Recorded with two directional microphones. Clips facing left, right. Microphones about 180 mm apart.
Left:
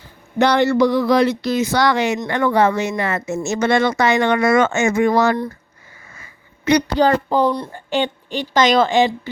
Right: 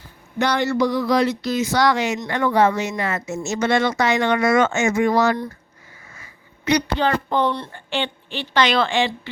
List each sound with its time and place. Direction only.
0.3 s speech: 65° left (ahead or behind)
6.7 s a woman's voice: 45° left (ahead or behind)